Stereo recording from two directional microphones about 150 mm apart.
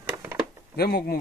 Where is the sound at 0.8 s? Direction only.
90° left.